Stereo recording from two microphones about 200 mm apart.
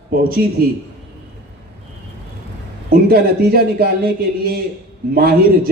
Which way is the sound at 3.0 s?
50° right (ahead or behind).